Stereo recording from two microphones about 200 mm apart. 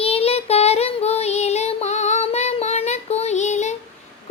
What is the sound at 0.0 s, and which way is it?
Child singing, 30° left (ahead or behind).